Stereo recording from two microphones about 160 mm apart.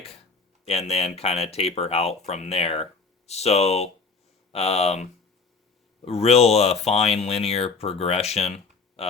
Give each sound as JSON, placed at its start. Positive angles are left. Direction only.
{"t": 0.6, "sound": "speech", "side_deg": 40}
{"t": 6.1, "sound": "speech", "side_deg": 40}